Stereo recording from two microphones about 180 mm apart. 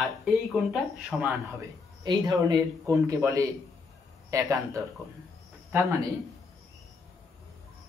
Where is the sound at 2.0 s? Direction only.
20° right (ahead or behind).